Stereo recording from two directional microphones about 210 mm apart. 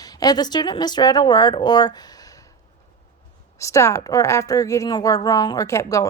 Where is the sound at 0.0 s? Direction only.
20° left (ahead or behind).